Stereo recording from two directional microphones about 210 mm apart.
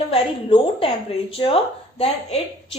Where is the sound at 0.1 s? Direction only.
25° left (ahead or behind).